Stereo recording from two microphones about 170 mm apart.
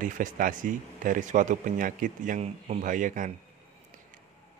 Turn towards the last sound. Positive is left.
turn(degrees=-50)  # may be behind; listen again after turning